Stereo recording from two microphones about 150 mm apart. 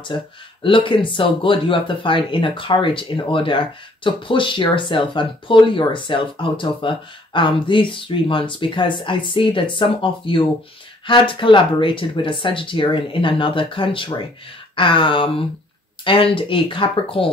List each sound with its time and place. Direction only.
0.0 s speech: 35° left (ahead or behind)